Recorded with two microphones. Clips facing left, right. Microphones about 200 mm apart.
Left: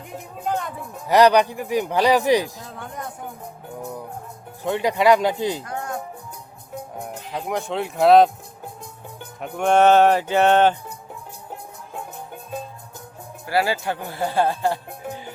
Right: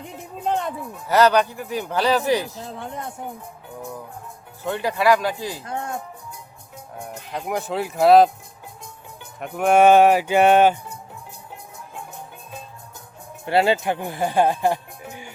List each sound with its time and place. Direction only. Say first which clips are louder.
0.4 s speech: right 2 dB; 25° right (ahead or behind)
1.0 s speech: left 2 dB; 15° left (ahead or behind)
2.6 s speech: right 2 dB; 30° right (ahead or behind)
4.6 s speech: left 2 dB; 15° left (ahead or behind)
5.6 s speech: right 1 dB; 25° right (ahead or behind)
7.3 s speech: even; centre (ahead or behind)
9.4 s speech: right 1 dB; 5° right (ahead or behind)
13.4 s speech: right 3 dB; 25° right (ahead or behind)